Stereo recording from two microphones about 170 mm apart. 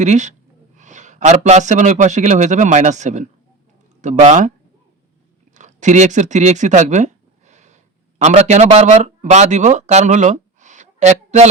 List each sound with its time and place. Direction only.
0.0 s a man's voice: 45° right (ahead or behind)
5.5 s a sound: 45° right (ahead or behind)
8.2 s a man's voice: 40° right (ahead or behind)